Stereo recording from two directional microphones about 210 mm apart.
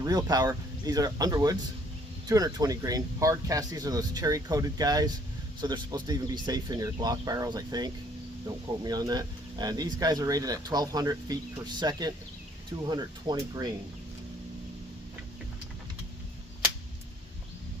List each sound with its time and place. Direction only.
0.0 s speech: 20° right (ahead or behind)